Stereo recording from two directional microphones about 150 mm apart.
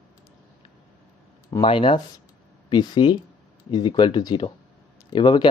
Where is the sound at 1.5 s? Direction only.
35° left (ahead or behind).